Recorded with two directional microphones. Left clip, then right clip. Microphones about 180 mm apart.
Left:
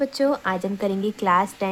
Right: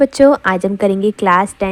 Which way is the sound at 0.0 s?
40° right (ahead or behind).